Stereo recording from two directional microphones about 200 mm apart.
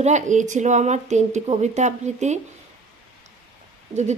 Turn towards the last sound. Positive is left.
turn(degrees=-35)  # may be behind; listen again after turning